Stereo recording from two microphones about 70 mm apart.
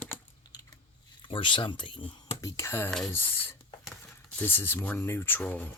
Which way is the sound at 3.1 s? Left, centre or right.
Left.